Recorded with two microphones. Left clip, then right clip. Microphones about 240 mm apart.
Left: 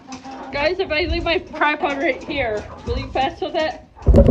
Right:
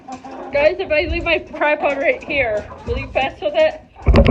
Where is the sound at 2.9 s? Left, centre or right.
Left.